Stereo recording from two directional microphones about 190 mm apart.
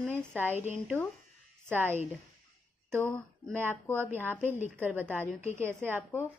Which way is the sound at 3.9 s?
10° right (ahead or behind).